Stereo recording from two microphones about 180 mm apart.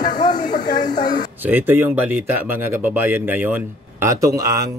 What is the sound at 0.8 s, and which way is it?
Speech, 25° left (ahead or behind).